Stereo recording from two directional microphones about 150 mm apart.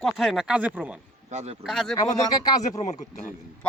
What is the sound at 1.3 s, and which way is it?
Speech, 50° right (ahead or behind).